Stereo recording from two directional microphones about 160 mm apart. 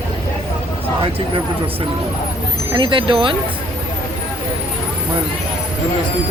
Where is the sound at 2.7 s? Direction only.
30° right (ahead or behind).